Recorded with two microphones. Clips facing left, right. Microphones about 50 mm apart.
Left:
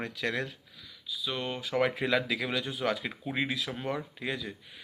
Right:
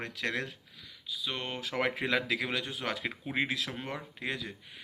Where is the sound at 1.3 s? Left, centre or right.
Right.